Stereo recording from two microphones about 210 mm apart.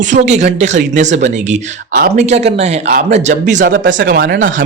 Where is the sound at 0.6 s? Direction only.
35° right (ahead or behind).